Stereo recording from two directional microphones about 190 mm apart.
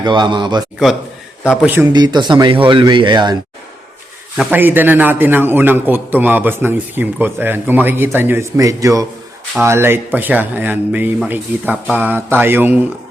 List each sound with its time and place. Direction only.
0.0 s speech: 25° right (ahead or behind)
1.5 s a man's voice: 10° right (ahead or behind)
1.9 s speech: 20° right (ahead or behind)
4.4 s a man's voice: 10° right (ahead or behind)